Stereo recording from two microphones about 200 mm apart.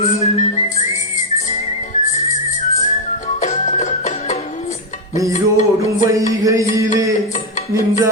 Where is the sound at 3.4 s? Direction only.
35° left (ahead or behind).